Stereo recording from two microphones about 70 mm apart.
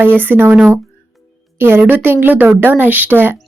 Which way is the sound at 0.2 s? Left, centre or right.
Right.